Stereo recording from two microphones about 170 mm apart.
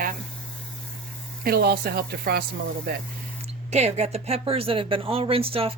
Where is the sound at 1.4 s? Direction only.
65° right (ahead or behind).